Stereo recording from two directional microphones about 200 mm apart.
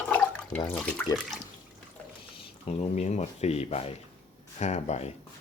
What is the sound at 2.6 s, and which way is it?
Speech, 30° left (ahead or behind).